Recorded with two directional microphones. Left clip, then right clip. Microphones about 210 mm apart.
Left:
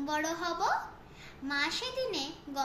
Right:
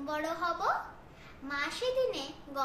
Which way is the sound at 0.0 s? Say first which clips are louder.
Even; 15° right (ahead or behind).